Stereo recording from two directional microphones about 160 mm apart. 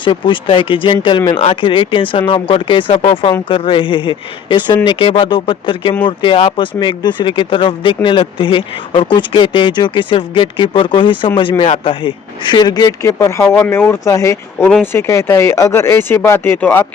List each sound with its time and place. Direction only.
0.0 s speech: 30° left (ahead or behind); by 16.8 s 10° left (ahead or behind)